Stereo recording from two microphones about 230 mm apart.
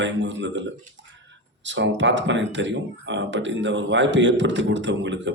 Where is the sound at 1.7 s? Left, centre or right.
Right.